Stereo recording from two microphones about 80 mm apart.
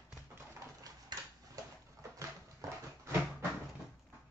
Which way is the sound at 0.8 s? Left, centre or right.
Right.